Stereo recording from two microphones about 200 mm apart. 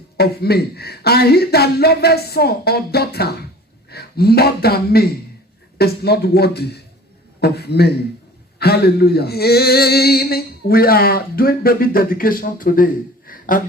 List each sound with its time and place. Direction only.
0.2 s male singing: 50° left (ahead or behind)
3.8 s speech: 50° left (ahead or behind)
5.7 s male singing: 55° left (ahead or behind)